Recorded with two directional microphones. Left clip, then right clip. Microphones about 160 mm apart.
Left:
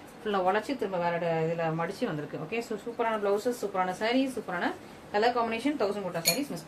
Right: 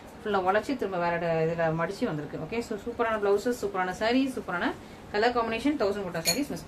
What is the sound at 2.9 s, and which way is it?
Speech, 30° right (ahead or behind).